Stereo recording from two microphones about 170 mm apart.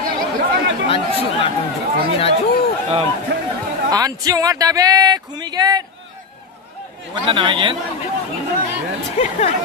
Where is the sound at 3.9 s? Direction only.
20° right (ahead or behind).